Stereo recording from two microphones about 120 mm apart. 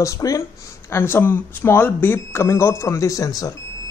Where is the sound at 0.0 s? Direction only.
30° left (ahead or behind).